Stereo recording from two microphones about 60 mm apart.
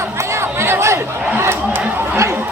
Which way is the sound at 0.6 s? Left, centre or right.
Right.